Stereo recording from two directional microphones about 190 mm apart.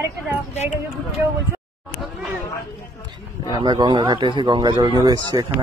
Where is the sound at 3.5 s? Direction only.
20° right (ahead or behind).